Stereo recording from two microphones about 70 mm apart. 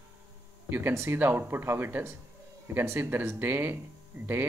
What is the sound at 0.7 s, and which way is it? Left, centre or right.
Speech, right.